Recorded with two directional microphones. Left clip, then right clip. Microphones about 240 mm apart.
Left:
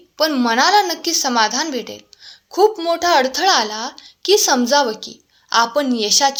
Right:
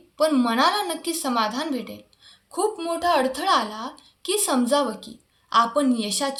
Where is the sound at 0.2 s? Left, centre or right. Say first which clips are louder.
Left 4 dB; left.